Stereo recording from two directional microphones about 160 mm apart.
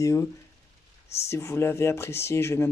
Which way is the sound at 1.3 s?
15° left (ahead or behind).